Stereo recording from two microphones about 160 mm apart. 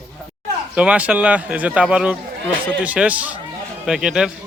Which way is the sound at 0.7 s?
5° right (ahead or behind).